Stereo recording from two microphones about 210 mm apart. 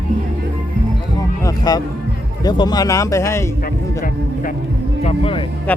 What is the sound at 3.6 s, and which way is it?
Music, 40° left (ahead or behind).